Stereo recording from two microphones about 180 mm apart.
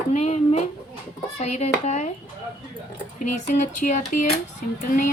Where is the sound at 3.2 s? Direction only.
40° left (ahead or behind).